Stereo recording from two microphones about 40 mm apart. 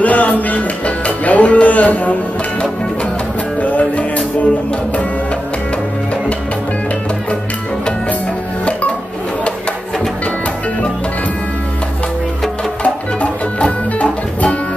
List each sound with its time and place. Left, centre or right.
0.0 s music: left
3.6 s music: left
12.8 s music: left